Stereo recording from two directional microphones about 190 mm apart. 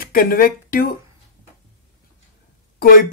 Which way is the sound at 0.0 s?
50° left (ahead or behind).